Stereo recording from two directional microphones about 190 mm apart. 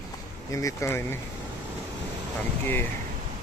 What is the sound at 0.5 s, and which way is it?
Speech, 15° left (ahead or behind).